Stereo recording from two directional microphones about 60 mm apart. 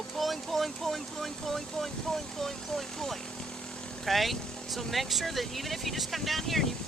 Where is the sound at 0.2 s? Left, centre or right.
Centre.